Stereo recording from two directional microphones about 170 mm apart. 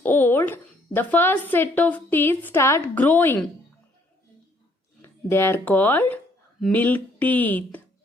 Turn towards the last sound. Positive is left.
turn(degrees=10)  # may be behind; listen again after turning